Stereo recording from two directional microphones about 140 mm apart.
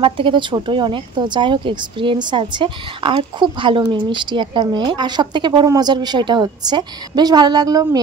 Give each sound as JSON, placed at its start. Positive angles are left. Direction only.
{"t": 0.0, "sound": "a woman's voice", "side_deg": -35}